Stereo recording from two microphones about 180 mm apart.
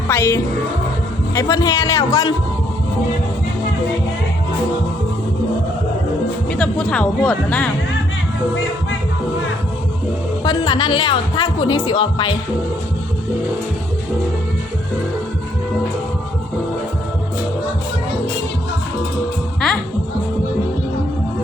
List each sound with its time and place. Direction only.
0.1 s a woman's voice: 15° left (ahead or behind)
6.6 s a woman's voice: 5° left (ahead or behind)
10.4 s a woman's voice: 25° left (ahead or behind)